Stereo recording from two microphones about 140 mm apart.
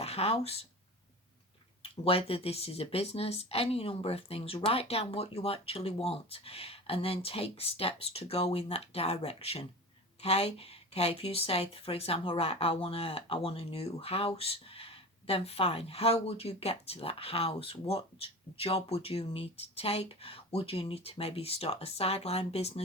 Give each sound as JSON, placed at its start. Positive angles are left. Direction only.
{"t": 0.0, "sound": "speech", "side_deg": 45}
{"t": 1.8, "sound": "a woman's voice", "side_deg": 45}